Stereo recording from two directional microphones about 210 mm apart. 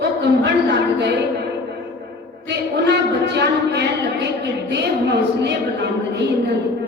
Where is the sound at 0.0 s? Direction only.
55° right (ahead or behind).